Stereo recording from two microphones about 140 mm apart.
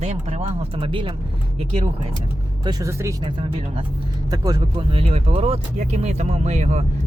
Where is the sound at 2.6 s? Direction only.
25° right (ahead or behind).